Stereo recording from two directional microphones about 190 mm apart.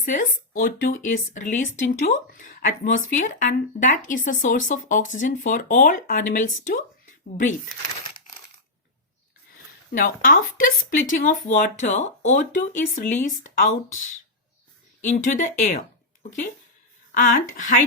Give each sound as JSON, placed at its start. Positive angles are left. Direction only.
{"t": 0.0, "sound": "speech", "side_deg": 45}
{"t": 9.9, "sound": "speech", "side_deg": 45}
{"t": 17.6, "sound": "speech", "side_deg": 40}